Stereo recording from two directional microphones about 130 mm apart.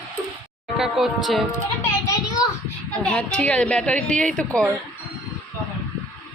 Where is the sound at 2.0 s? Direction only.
25° left (ahead or behind).